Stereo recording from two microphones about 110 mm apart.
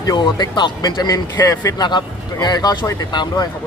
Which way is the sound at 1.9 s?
40° left (ahead or behind).